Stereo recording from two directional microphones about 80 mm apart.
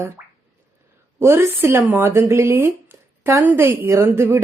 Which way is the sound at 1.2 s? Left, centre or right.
Right.